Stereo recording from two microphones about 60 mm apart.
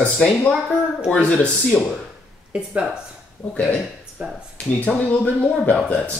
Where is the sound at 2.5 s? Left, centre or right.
Centre.